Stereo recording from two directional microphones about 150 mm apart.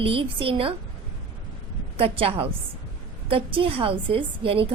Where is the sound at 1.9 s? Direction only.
40° right (ahead or behind).